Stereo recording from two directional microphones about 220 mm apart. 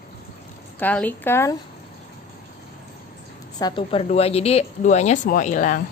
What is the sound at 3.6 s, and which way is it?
A woman's voice, 25° left (ahead or behind).